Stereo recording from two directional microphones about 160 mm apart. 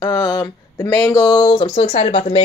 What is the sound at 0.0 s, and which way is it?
Speech, 20° left (ahead or behind).